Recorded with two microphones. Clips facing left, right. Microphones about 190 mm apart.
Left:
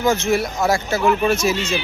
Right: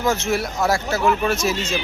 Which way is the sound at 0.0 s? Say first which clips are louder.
Left 3 dB; 5° right (ahead or behind).